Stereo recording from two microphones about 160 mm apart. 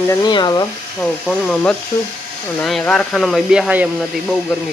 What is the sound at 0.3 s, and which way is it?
Speech, 25° left (ahead or behind).